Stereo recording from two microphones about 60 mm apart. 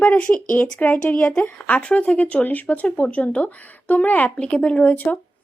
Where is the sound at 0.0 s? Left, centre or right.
Left.